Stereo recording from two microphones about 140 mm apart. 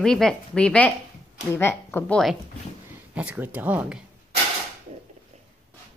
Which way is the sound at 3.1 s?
10° right (ahead or behind).